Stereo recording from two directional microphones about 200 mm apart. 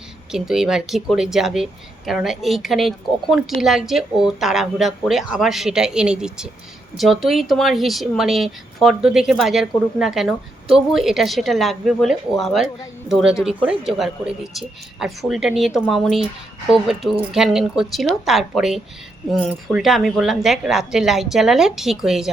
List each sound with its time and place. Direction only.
0.3 s a woman's voice: 5° right (ahead or behind)